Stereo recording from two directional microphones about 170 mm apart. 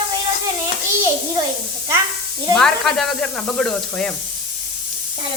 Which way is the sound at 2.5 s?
Centre (ahead or behind).